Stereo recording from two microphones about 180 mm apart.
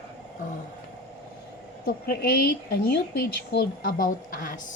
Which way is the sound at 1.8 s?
55° left (ahead or behind).